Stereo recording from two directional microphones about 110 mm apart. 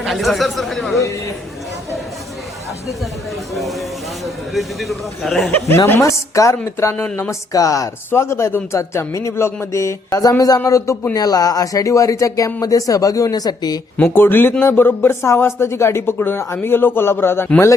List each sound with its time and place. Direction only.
0.0 s speech: centre (ahead or behind)
3.5 s speech: centre (ahead or behind)
5.5 s speech: 20° left (ahead or behind); by 13.7 s 35° left (ahead or behind)
14.0 s speech: 20° left (ahead or behind)